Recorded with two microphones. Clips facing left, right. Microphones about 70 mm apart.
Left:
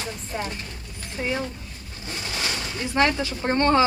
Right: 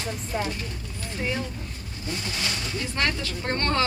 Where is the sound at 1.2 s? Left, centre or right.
Centre.